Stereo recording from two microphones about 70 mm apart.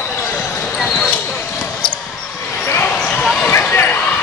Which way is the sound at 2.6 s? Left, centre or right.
Left.